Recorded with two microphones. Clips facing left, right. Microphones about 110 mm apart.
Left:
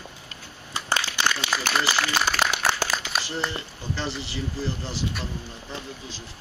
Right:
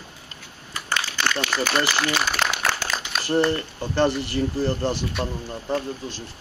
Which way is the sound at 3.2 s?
55° right (ahead or behind).